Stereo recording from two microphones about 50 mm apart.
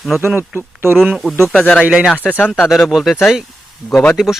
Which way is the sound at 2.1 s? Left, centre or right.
Left.